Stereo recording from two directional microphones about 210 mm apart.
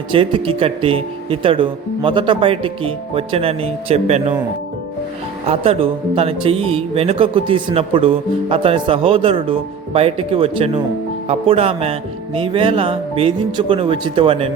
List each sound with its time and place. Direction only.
0.1 s speech: 25° right (ahead or behind)
5.5 s speech: 30° right (ahead or behind)